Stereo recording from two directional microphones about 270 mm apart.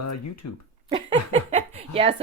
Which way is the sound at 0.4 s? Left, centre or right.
Left.